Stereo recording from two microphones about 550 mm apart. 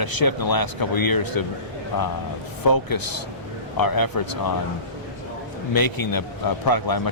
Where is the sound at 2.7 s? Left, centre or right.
Left.